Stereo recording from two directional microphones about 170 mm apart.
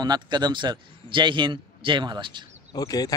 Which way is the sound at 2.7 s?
20° left (ahead or behind).